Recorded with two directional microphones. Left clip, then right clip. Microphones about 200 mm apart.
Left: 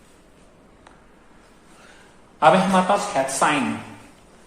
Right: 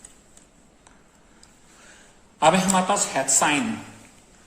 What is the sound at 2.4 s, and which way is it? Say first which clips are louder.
A woman's voice: left 3 dB; 45° right (ahead or behind).